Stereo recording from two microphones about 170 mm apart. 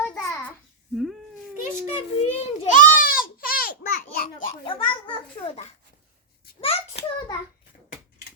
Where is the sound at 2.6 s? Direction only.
50° left (ahead or behind).